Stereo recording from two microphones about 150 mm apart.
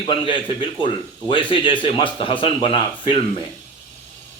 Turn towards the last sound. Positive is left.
turn(degrees=35)  # may be behind; listen again after turning